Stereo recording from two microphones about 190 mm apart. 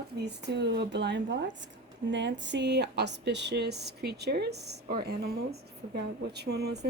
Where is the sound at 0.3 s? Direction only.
65° right (ahead or behind).